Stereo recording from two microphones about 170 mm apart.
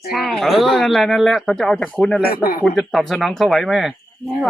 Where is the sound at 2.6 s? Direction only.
Centre (ahead or behind).